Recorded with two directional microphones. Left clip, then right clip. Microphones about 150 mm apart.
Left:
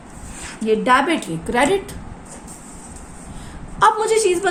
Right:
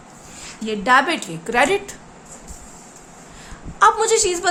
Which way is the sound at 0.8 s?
15° right (ahead or behind).